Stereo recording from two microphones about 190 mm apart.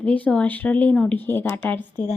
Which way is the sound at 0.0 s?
5° left (ahead or behind).